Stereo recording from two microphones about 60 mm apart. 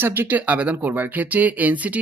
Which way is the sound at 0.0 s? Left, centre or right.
Right.